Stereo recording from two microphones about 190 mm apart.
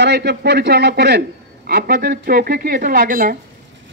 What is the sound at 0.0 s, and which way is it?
A man's voice, 60° right (ahead or behind).